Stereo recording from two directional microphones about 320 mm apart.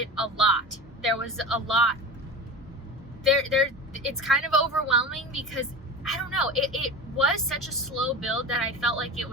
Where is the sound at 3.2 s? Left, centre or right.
Centre.